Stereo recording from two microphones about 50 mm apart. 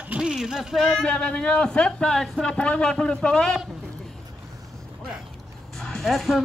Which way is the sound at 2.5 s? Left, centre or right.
Left.